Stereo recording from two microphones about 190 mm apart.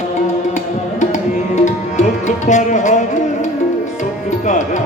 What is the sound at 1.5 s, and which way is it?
Music, 40° left (ahead or behind).